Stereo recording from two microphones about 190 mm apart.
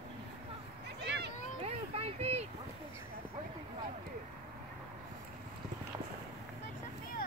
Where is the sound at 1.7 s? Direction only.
30° right (ahead or behind).